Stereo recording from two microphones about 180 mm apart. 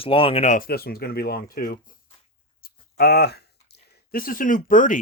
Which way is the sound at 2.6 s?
60° left (ahead or behind).